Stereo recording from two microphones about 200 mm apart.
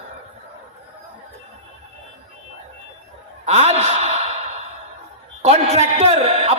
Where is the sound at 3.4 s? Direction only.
30° right (ahead or behind).